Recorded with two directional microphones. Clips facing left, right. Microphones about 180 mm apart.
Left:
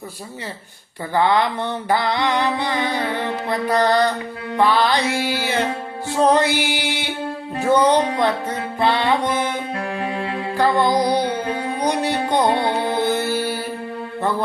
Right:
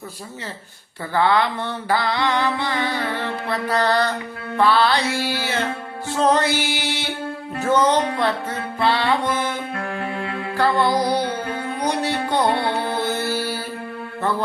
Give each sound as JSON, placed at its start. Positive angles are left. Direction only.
{"t": 1.1, "sound": "music", "side_deg": 15}
{"t": 10.2, "sound": "mantra", "side_deg": 25}
{"t": 10.6, "sound": "music", "side_deg": 15}